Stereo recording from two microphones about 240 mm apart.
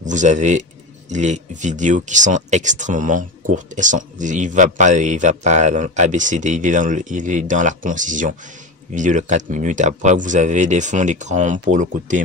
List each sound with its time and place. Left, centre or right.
0.0 s speech: right